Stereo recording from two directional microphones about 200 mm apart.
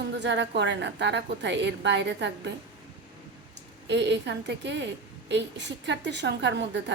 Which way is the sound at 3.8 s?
60° right (ahead or behind).